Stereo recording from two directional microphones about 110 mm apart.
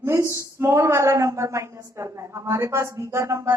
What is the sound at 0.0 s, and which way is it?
A woman's voice, 25° right (ahead or behind).